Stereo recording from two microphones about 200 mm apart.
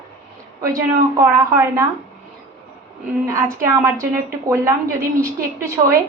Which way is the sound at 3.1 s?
15° right (ahead or behind).